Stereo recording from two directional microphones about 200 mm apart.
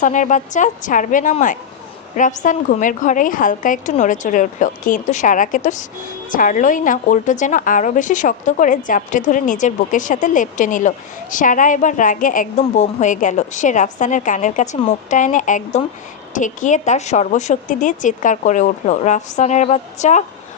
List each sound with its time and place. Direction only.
0.0 s a woman's voice: 40° left (ahead or behind)